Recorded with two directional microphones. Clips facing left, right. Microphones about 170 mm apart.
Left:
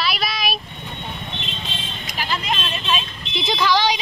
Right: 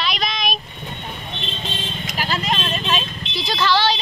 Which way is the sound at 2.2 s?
40° right (ahead or behind).